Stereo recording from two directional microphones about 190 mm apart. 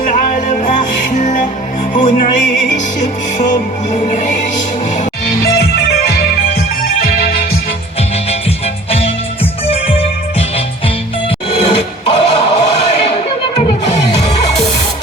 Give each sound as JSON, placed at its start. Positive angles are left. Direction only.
{"t": 0.0, "sound": "music", "side_deg": 45}
{"t": 5.2, "sound": "music", "side_deg": 55}
{"t": 8.3, "sound": "music", "side_deg": 30}